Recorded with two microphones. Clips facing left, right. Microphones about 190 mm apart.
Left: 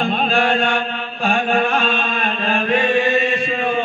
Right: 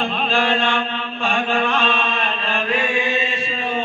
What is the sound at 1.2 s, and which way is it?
Chant, 50° left (ahead or behind).